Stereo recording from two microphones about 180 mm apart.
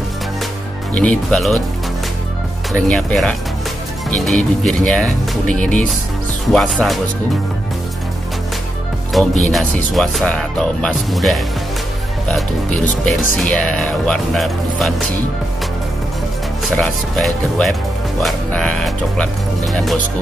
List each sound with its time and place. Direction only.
0.9 s speech: 5° left (ahead or behind)
2.7 s speech: 5° left (ahead or behind)
9.1 s speech: centre (ahead or behind)
16.7 s speech: 5° left (ahead or behind)